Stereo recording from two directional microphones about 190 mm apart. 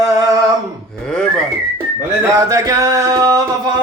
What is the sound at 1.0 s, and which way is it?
Whistling, 5° left (ahead or behind).